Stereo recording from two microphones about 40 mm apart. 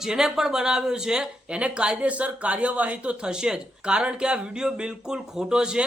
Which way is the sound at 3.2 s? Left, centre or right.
Centre.